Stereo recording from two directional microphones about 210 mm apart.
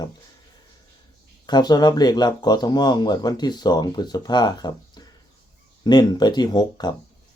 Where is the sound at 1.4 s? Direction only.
20° left (ahead or behind).